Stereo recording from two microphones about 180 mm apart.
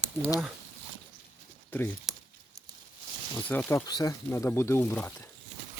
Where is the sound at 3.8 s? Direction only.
20° left (ahead or behind).